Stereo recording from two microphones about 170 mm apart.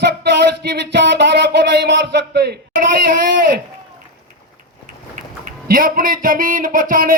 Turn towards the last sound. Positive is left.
turn(degrees=-55)  # may be behind; listen again after turning